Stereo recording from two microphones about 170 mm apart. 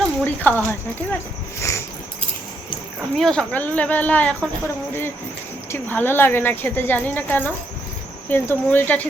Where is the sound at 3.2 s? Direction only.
5° left (ahead or behind).